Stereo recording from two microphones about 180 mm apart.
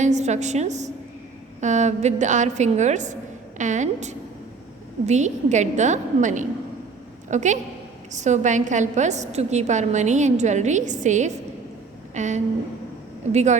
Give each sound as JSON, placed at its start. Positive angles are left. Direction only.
{"t": 0.0, "sound": "a woman's voice", "side_deg": -40}